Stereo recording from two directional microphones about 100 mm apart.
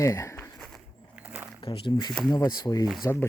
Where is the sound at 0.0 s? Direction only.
35° left (ahead or behind).